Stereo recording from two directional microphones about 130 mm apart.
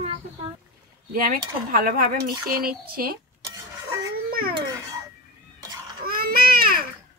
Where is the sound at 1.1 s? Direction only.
90° right.